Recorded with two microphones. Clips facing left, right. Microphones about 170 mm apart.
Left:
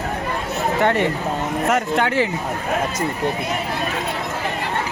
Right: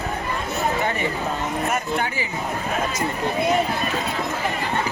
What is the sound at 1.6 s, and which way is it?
Speech, 85° left.